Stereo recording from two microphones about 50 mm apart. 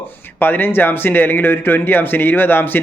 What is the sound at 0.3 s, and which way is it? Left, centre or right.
A man's voice, left.